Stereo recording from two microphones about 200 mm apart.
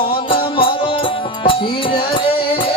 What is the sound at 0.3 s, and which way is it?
Music, 25° left (ahead or behind).